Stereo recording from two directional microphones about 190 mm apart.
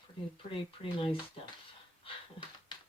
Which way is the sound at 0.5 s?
30° left (ahead or behind).